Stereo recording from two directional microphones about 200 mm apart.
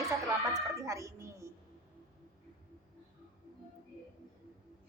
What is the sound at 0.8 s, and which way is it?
Speech, 15° right (ahead or behind).